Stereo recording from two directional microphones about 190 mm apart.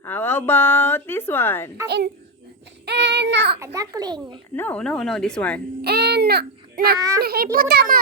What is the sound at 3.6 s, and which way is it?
Speech, 15° right (ahead or behind).